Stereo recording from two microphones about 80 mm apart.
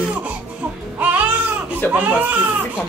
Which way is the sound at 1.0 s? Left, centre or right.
Right.